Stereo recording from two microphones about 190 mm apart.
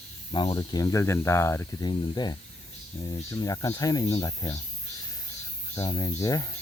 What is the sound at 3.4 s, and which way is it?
Speech, 15° left (ahead or behind).